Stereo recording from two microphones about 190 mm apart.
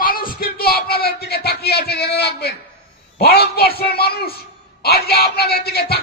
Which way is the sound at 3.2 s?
55° left (ahead or behind).